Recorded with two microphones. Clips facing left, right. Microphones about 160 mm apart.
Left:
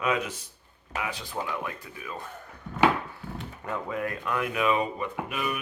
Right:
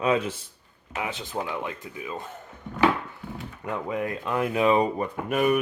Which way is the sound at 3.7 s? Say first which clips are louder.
Right 3 dB; 20° right (ahead or behind).